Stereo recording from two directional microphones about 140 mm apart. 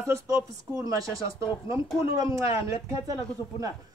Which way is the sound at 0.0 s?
20° right (ahead or behind).